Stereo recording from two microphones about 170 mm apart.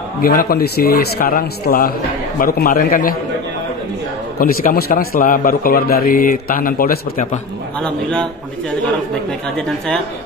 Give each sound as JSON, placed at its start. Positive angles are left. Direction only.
{"t": 0.2, "sound": "a man's voice", "side_deg": 60}
{"t": 4.4, "sound": "a man's voice", "side_deg": 60}
{"t": 7.8, "sound": "a man's voice", "side_deg": 5}
{"t": 9.6, "sound": "a man's voice", "side_deg": 5}